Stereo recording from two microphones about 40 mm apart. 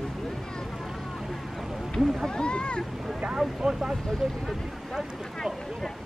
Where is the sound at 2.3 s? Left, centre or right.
Left.